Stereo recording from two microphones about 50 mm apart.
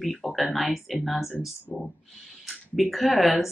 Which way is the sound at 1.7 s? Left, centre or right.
Left.